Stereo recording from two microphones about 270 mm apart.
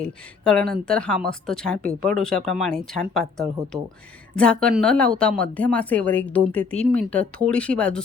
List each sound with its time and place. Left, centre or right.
0.0 s a woman's voice: centre